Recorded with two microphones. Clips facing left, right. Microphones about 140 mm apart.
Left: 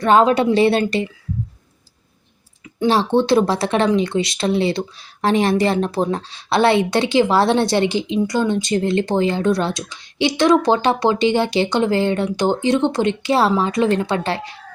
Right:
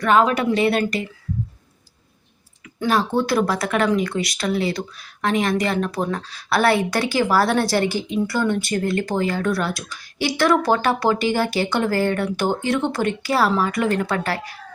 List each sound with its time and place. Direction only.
0.0 s speech: 30° left (ahead or behind)
2.8 s speech: 25° left (ahead or behind)